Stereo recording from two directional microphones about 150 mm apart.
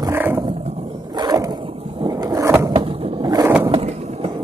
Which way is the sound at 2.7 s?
30° right (ahead or behind).